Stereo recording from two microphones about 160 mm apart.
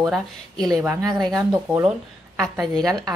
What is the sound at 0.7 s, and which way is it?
Speech, 20° right (ahead or behind).